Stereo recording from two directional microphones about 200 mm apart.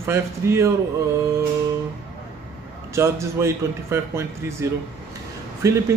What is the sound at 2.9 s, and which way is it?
Speech, 15° right (ahead or behind).